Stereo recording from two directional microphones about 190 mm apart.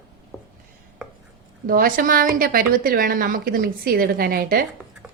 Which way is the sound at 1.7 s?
50° right (ahead or behind).